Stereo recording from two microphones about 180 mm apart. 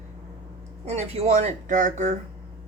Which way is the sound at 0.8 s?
35° right (ahead or behind).